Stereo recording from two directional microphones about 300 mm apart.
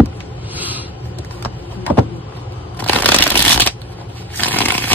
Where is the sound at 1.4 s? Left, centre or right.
Centre.